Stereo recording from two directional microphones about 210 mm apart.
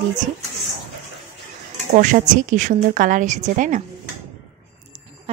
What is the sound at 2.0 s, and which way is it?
A woman's voice, 40° right (ahead or behind).